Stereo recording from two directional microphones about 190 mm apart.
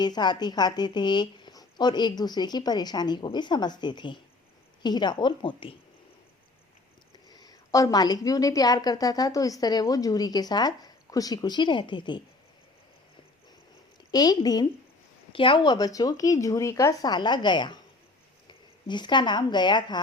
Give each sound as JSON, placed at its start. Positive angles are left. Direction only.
{"t": 0.0, "sound": "a woman's voice", "side_deg": 20}
{"t": 7.3, "sound": "a woman's voice", "side_deg": 20}
{"t": 14.1, "sound": "a woman's voice", "side_deg": 20}
{"t": 18.9, "sound": "a woman's voice", "side_deg": 25}